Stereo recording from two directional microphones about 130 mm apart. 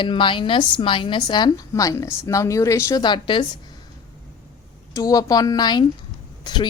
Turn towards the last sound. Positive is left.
turn(degrees=35)  # may be behind; listen again after turning